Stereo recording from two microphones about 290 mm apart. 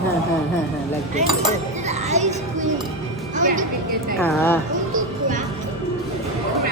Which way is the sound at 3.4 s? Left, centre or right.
Right.